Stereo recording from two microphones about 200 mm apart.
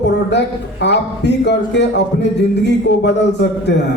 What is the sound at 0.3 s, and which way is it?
A man's voice, 60° left (ahead or behind).